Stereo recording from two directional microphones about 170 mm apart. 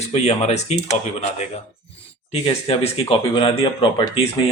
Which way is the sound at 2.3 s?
35° left (ahead or behind).